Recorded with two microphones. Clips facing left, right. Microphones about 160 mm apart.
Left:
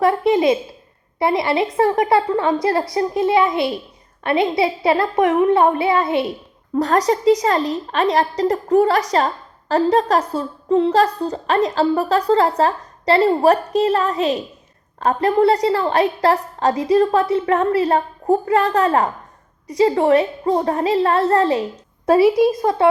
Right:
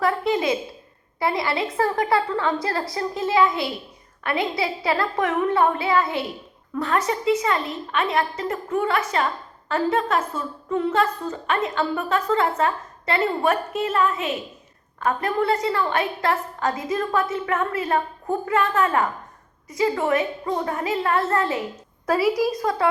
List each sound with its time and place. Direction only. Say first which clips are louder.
0.0 s a sound: left 6 dB; 25° left (ahead or behind)
1.2 s a woman's voice: left 6 dB; 25° left (ahead or behind)
6.7 s a woman's voice: left 7 dB; 35° left (ahead or behind)